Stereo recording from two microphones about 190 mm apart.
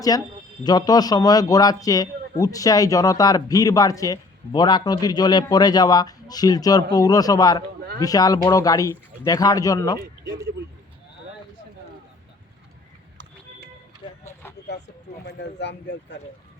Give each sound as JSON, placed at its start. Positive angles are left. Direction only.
{"t": 0.1, "sound": "a man's voice", "side_deg": 20}
{"t": 15.2, "sound": "speech", "side_deg": 65}